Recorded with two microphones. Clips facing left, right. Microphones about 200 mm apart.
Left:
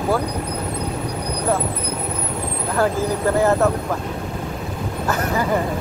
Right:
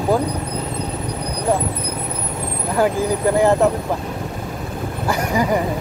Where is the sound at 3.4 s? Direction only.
15° right (ahead or behind).